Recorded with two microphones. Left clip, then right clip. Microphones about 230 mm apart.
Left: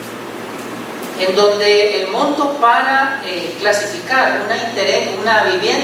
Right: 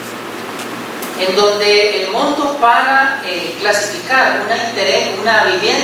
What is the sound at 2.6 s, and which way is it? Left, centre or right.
A woman's voice, centre.